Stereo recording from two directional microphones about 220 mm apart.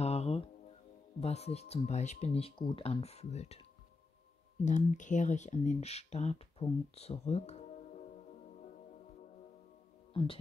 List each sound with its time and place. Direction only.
0.0 s music: 30° left (ahead or behind)
1.2 s speech: 30° left (ahead or behind)
4.6 s speech: 35° left (ahead or behind)